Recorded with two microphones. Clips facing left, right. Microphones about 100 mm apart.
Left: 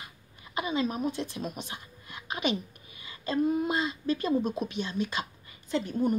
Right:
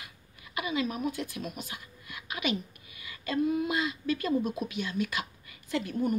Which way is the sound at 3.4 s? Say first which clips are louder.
Left 1 dB; 45° left (ahead or behind).